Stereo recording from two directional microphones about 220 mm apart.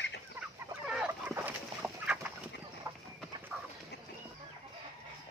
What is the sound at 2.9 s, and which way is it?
Chicken, 15° right (ahead or behind).